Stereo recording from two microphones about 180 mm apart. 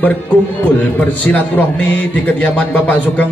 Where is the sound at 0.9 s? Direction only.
10° left (ahead or behind).